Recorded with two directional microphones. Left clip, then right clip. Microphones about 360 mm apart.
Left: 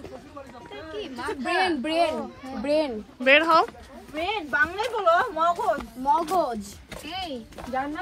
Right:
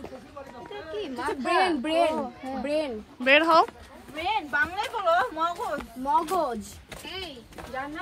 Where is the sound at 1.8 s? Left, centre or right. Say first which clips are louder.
Even; centre.